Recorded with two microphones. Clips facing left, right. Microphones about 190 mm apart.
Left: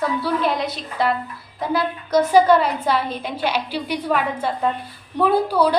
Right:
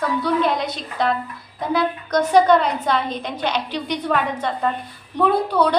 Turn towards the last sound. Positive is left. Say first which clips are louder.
# left 1 dB
turn(degrees=5)  # may be behind; listen again after turning